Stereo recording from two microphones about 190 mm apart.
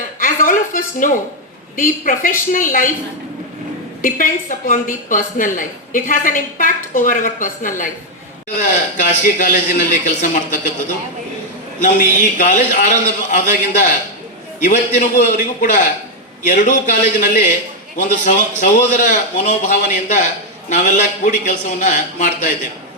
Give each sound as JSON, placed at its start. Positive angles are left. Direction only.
{"t": 0.2, "sound": "a sound", "side_deg": 45}
{"t": 1.7, "sound": "a woman's voice", "side_deg": 45}
{"t": 4.0, "sound": "a woman's voice", "side_deg": 45}
{"t": 11.8, "sound": "a man's voice", "side_deg": 40}